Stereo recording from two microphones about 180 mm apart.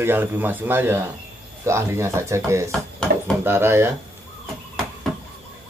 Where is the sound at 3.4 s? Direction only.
15° right (ahead or behind).